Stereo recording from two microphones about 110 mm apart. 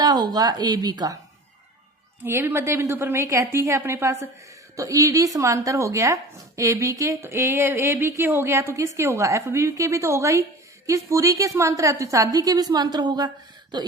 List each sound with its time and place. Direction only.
0.0 s a woman's voice: 40° right (ahead or behind)
2.2 s a woman's voice: 20° right (ahead or behind); by 13.8 s 40° right (ahead or behind)